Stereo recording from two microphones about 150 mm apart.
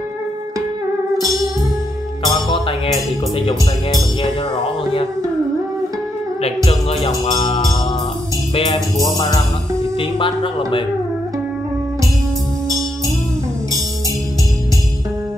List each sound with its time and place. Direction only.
2.2 s music: 30° left (ahead or behind)
3.3 s speech: 30° left (ahead or behind)
7.2 s music: 30° left (ahead or behind)
8.7 s music: centre (ahead or behind)
9.1 s music: 30° left (ahead or behind)
9.9 s speech: 35° left (ahead or behind)